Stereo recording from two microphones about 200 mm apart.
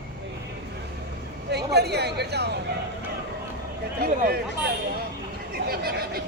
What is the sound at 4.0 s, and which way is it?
Speech, 50° right (ahead or behind).